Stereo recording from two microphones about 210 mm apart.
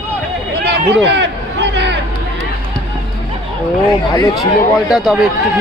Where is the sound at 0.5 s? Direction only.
55° right (ahead or behind).